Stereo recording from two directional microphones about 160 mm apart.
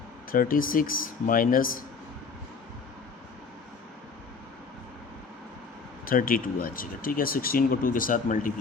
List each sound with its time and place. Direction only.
0.3 s speech: 60° left (ahead or behind)
6.1 s speech: 60° left (ahead or behind)